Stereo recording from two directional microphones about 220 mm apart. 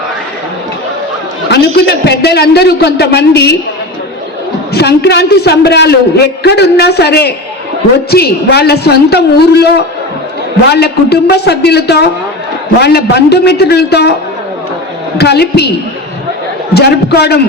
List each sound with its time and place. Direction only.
1.5 s a man's voice: 50° left (ahead or behind)
4.7 s a man's voice: 45° left (ahead or behind)
15.2 s a man's voice: 50° left (ahead or behind)
16.7 s a man's voice: 45° left (ahead or behind)